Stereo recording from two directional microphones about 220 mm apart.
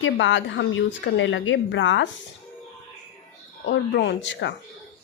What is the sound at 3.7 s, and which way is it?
Speech, 50° left (ahead or behind).